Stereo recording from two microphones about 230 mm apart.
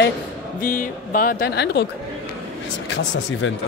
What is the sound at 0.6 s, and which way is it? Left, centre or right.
Speech, left.